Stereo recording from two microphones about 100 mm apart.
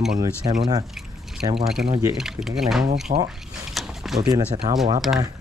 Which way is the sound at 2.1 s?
5° right (ahead or behind).